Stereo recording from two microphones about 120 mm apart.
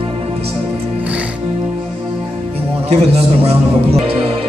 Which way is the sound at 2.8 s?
60° right (ahead or behind).